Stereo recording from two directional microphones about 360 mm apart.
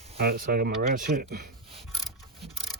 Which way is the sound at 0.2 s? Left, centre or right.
Right.